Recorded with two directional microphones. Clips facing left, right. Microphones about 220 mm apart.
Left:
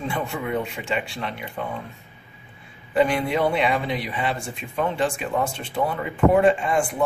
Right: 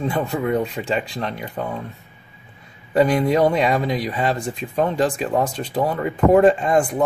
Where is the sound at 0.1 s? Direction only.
40° right (ahead or behind).